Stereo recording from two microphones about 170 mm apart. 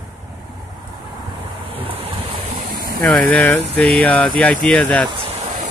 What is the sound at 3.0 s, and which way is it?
Speech, 10° left (ahead or behind).